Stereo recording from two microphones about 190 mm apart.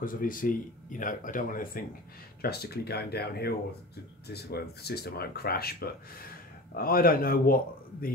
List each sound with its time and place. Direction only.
0.0 s speech: 45° left (ahead or behind)